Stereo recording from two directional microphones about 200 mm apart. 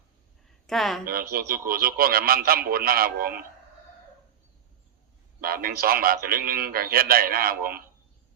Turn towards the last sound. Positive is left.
turn(degrees=-45)  # may be behind; listen again after turning